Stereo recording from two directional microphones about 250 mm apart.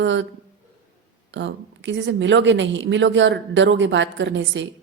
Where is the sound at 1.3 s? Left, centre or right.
Right.